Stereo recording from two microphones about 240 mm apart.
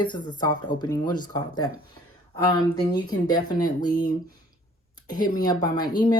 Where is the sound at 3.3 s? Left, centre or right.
Centre.